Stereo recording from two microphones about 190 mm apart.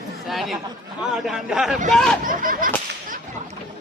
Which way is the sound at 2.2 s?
45° right (ahead or behind).